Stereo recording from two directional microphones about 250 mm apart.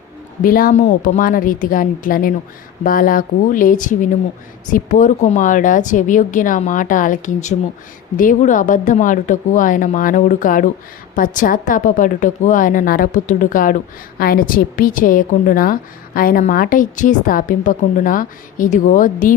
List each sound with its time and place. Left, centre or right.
0.4 s a woman's voice: left